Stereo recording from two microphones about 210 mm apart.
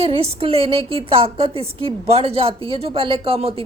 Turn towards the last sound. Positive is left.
turn(degrees=-25)  # may be behind; listen again after turning